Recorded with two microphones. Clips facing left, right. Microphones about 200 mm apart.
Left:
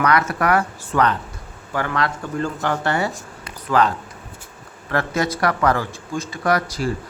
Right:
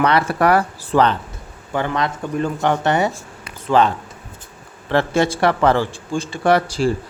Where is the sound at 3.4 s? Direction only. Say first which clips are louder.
Right 3 dB; 25° right (ahead or behind).